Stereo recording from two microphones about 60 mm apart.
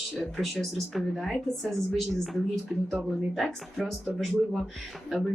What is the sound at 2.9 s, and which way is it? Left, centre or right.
Speech, centre.